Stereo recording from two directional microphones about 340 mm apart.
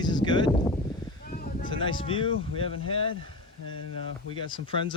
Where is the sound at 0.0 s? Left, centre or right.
Centre.